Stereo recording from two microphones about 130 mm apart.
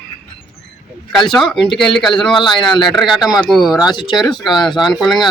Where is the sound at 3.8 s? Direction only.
35° left (ahead or behind).